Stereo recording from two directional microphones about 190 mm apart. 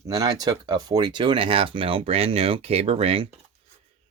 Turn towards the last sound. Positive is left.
turn(degrees=-30)  # may be behind; listen again after turning